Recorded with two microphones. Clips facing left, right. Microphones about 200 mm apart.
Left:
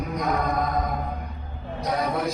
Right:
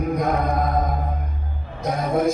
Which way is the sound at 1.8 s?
50° right (ahead or behind).